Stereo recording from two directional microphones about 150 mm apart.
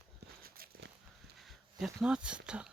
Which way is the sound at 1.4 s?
5° right (ahead or behind).